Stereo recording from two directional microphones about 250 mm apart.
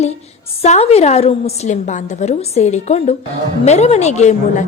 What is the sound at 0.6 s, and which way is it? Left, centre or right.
A woman's voice, left.